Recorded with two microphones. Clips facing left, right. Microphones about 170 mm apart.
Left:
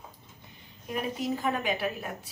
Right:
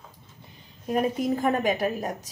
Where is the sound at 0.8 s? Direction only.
45° right (ahead or behind).